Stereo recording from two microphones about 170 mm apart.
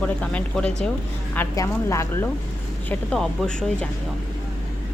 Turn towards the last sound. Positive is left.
turn(degrees=5)  # may be behind; listen again after turning